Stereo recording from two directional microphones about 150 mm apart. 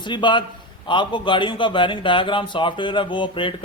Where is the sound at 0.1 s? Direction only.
30° left (ahead or behind).